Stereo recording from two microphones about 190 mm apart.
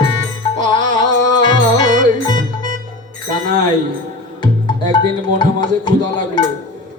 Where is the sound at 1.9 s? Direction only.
45° right (ahead or behind).